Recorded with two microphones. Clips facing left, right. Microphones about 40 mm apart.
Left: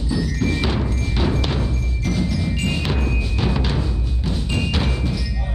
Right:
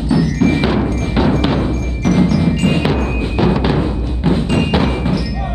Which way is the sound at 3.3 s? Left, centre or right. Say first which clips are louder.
Right 10 dB; right.